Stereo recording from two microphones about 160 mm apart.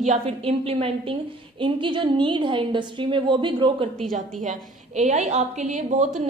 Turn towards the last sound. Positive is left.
turn(degrees=-45)  # may be behind; listen again after turning